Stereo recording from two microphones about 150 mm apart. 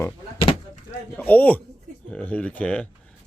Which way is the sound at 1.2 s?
10° left (ahead or behind).